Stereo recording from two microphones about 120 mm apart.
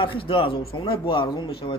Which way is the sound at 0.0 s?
45° left (ahead or behind).